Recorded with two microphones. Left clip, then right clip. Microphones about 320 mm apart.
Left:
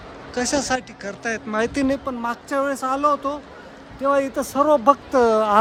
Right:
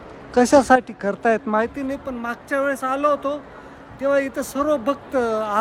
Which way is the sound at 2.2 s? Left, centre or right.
Centre.